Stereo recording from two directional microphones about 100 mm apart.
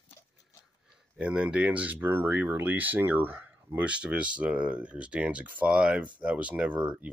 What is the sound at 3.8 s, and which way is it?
Speech, 10° right (ahead or behind).